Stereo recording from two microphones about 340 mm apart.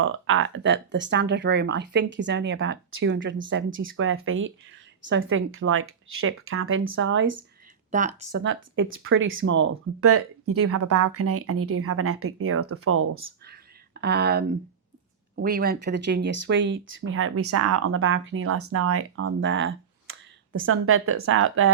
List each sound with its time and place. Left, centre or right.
0.0 s speech: right
7.9 s speech: right
8.4 s speech: right
13.2 s a sound: right
15.4 s speech: right